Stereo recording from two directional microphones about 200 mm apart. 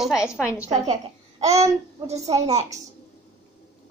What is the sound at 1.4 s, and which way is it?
A woman's voice, 15° right (ahead or behind).